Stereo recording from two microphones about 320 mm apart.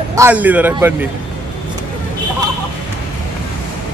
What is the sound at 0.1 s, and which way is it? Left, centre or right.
Speech, centre.